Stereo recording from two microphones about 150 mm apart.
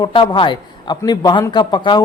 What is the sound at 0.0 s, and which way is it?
A man's voice, 30° left (ahead or behind).